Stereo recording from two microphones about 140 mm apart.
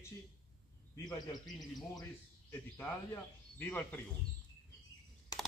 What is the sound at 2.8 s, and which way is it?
Speech, 15° left (ahead or behind).